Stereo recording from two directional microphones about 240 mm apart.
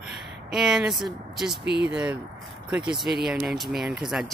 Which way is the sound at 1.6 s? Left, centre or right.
Right.